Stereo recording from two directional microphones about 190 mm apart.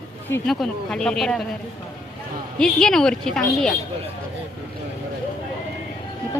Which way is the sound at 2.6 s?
5° left (ahead or behind).